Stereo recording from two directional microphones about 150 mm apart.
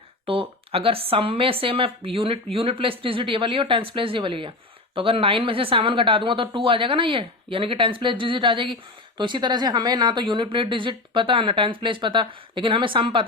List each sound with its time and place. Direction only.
0.3 s speech: 35° right (ahead or behind)